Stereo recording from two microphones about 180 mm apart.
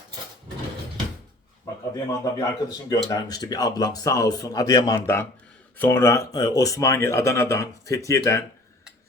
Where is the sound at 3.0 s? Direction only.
20° left (ahead or behind).